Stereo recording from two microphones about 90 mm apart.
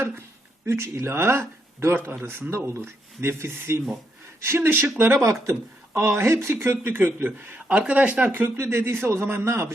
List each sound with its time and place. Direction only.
0.0 s speech: 30° right (ahead or behind)